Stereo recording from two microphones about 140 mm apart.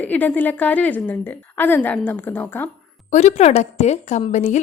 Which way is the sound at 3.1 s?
55° left (ahead or behind).